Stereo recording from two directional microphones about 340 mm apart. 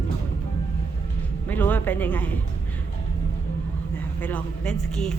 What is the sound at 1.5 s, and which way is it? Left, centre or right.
Speech, centre.